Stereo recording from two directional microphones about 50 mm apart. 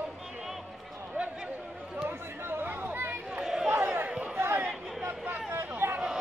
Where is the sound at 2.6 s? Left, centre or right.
Right.